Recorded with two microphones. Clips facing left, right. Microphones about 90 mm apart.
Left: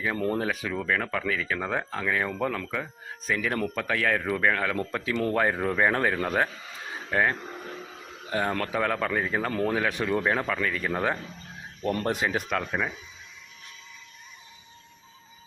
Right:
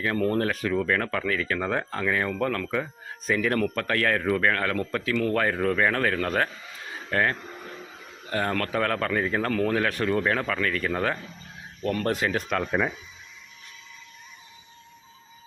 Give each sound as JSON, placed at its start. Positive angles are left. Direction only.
{"t": 0.0, "sound": "speech", "side_deg": 10}
{"t": 2.6, "sound": "speech", "side_deg": 0}
{"t": 9.5, "sound": "speech", "side_deg": 25}
{"t": 9.7, "sound": "speech", "side_deg": 10}
{"t": 11.8, "sound": "speech", "side_deg": 25}
{"t": 12.0, "sound": "speech", "side_deg": 15}
{"t": 12.5, "sound": "speech", "side_deg": 0}